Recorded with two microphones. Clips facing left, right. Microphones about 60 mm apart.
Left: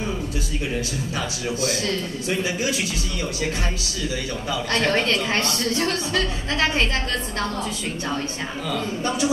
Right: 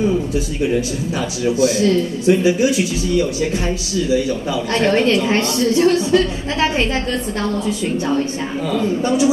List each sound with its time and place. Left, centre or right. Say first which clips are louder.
2.2 s a woman's voice: right 11 dB; centre
4.7 s a woman's voice: right 6 dB; right